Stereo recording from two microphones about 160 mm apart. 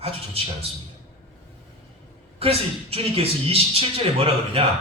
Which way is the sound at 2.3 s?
40° right (ahead or behind).